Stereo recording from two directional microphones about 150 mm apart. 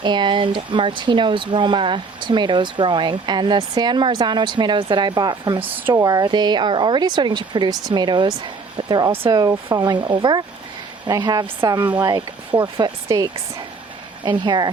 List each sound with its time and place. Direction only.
0.0 s speech: 30° right (ahead or behind)
5.6 s speech: 15° right (ahead or behind)
5.9 s speech: 25° right (ahead or behind)